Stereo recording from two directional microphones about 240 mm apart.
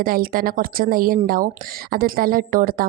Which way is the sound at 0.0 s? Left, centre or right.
Right.